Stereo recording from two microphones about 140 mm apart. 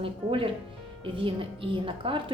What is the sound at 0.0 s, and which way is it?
A woman's voice, 40° right (ahead or behind).